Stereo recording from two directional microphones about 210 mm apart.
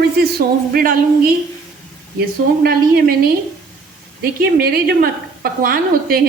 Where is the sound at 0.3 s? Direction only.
45° right (ahead or behind).